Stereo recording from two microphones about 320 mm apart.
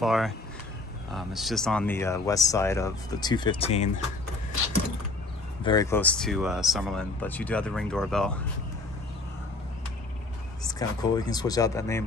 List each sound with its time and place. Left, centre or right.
0.0 s speech: centre
5.6 s speech: centre
10.7 s speech: centre